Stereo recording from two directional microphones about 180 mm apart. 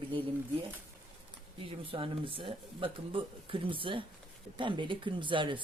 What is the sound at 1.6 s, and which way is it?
Speech, 30° right (ahead or behind).